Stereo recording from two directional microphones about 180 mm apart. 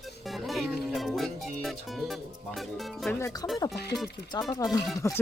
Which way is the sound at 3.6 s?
20° left (ahead or behind).